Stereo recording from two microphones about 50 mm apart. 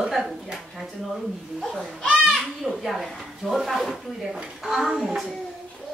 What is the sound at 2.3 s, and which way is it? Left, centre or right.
Speech, centre.